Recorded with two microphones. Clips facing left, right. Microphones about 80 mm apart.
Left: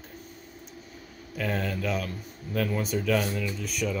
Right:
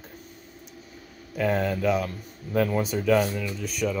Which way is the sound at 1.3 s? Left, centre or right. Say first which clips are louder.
Right 6 dB; centre.